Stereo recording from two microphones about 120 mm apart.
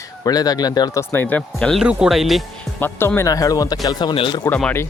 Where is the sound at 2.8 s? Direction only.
15° left (ahead or behind); by 4.1 s 35° left (ahead or behind).